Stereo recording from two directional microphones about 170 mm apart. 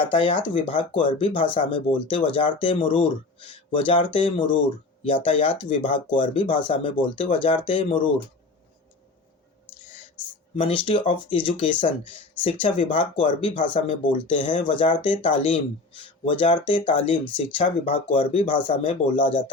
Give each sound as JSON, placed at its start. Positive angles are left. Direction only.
{"t": 0.1, "sound": "speech", "side_deg": 30}
{"t": 10.5, "sound": "speech", "side_deg": 30}
{"t": 19.0, "sound": "a man's voice", "side_deg": 50}